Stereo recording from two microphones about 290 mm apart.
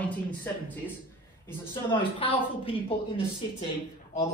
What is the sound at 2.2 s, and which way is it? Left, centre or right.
A woman's voice, centre.